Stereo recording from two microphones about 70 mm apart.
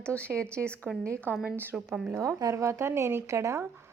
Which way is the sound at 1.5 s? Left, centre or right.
Right.